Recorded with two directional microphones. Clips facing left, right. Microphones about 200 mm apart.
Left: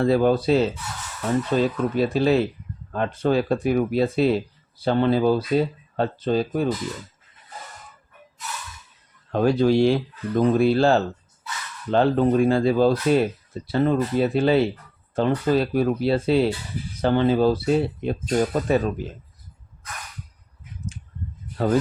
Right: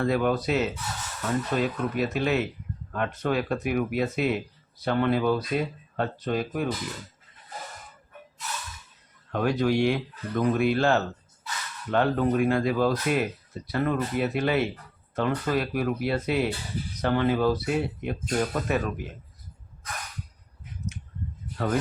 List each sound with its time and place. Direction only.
0.0 s speech: 30° left (ahead or behind)
9.3 s speech: 30° left (ahead or behind)